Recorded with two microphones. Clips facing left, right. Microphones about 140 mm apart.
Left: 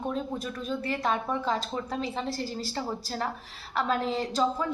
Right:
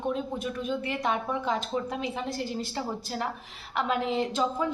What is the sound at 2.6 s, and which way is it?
A woman's voice, 15° right (ahead or behind).